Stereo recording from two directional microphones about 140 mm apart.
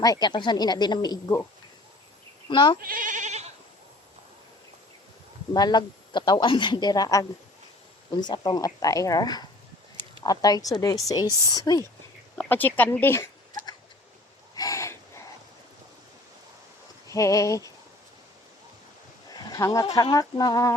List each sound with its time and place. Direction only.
0.0 s a woman's voice: 30° left (ahead or behind)
2.5 s speech: 35° left (ahead or behind)
2.8 s bleat: 80° right; by 3.5 s 55° right (ahead or behind)
5.5 s a woman's voice: 30° left (ahead or behind)
12.4 s speech: 10° left (ahead or behind)
14.5 s a sound: 25° left (ahead or behind)
17.1 s a woman's voice: 25° left (ahead or behind)
19.3 s speech: 25° left (ahead or behind)